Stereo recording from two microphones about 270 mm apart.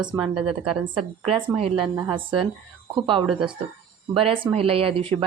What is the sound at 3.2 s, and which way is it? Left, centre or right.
Speech, centre.